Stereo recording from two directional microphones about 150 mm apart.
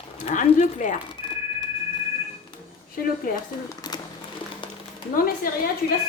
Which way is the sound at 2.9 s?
70° left (ahead or behind).